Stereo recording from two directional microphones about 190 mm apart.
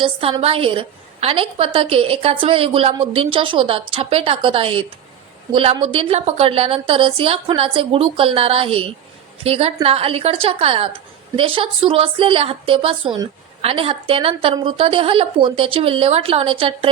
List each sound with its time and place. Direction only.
0.0 s a woman's voice: 30° right (ahead or behind)